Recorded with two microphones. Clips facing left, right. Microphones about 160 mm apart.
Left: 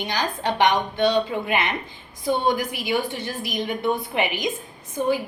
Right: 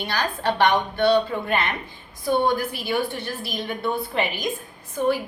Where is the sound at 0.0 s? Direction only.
15° left (ahead or behind).